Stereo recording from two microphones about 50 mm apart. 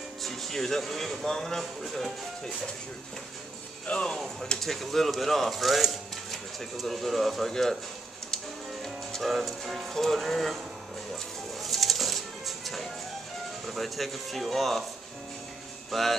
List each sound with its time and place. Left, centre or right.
0.2 s speech: centre
3.8 s speech: left
4.5 s speech: centre
8.8 s speech: centre
11.6 s music: centre
13.7 s speech: centre
15.9 s speech: centre